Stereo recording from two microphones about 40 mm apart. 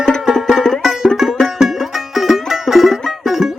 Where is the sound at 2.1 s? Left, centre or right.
Centre.